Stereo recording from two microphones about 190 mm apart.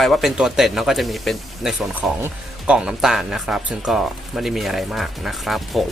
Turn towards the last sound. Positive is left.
turn(degrees=0)  # may be behind; listen again after turning